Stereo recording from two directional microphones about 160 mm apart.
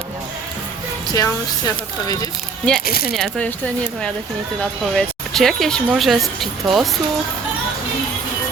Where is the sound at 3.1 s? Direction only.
5° left (ahead or behind).